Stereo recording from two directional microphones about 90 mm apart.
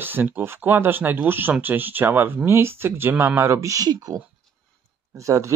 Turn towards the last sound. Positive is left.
turn(degrees=-35)  # may be behind; listen again after turning